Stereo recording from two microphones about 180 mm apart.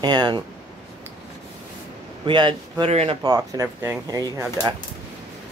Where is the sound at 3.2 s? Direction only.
20° right (ahead or behind).